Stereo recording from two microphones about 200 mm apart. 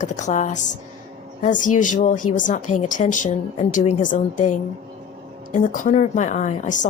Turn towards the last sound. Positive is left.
turn(degrees=40)  # may be behind; listen again after turning